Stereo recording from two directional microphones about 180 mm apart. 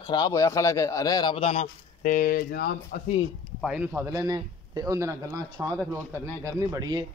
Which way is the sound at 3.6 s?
5° right (ahead or behind).